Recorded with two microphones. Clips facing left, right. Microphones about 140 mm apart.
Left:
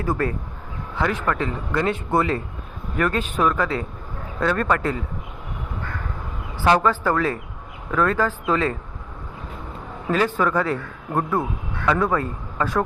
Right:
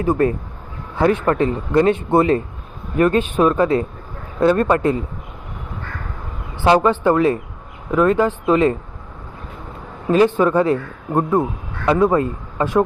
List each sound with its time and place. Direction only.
0.0 s speech: 20° right (ahead or behind)
6.7 s speech: 25° right (ahead or behind)
10.1 s speech: 20° right (ahead or behind)